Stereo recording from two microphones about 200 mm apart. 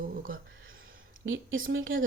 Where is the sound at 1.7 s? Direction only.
75° right (ahead or behind).